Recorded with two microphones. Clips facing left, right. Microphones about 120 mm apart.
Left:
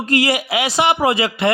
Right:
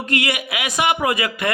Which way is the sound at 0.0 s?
35° left (ahead or behind).